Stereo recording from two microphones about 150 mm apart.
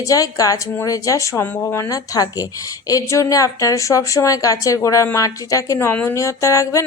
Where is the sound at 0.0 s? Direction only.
25° left (ahead or behind).